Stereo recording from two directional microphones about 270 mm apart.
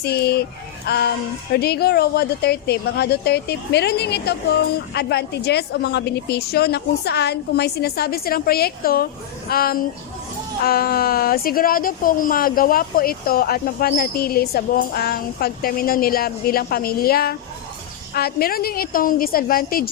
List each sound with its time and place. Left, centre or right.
0.0 s a woman's voice: left